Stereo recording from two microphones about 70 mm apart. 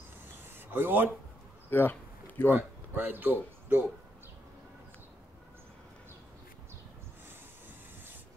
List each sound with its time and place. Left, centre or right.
0.6 s speech: right
1.7 s a sound: left
2.5 s speech: right